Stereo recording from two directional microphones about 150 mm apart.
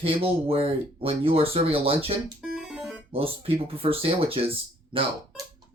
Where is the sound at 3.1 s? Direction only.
40° right (ahead or behind).